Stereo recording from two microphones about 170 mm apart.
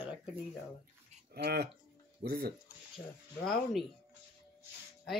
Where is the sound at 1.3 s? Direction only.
70° right (ahead or behind).